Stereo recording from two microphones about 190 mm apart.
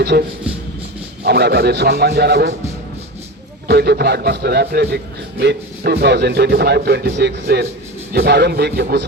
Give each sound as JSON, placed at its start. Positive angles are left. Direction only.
{"t": 0.0, "sound": "speech", "side_deg": -55}
{"t": 3.7, "sound": "speech", "side_deg": -60}